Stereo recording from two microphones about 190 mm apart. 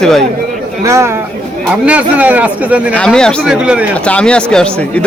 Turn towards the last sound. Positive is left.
turn(degrees=5)  # may be behind; listen again after turning